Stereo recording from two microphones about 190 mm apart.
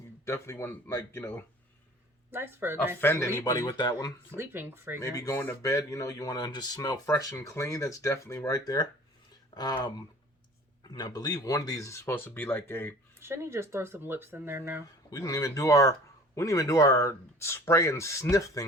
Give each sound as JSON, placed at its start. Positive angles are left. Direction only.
{"t": 0.3, "sound": "speech", "side_deg": 15}
{"t": 2.3, "sound": "speech", "side_deg": -10}
{"t": 3.0, "sound": "speech", "side_deg": 15}
{"t": 4.4, "sound": "speech", "side_deg": -15}
{"t": 4.9, "sound": "speech", "side_deg": 15}
{"t": 13.1, "sound": "speech", "side_deg": -15}
{"t": 15.1, "sound": "speech", "side_deg": 20}